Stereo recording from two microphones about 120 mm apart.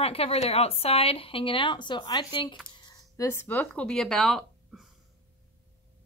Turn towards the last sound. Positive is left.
turn(degrees=0)  # may be behind; listen again after turning